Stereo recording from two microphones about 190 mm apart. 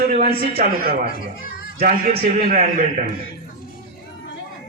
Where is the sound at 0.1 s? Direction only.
50° right (ahead or behind).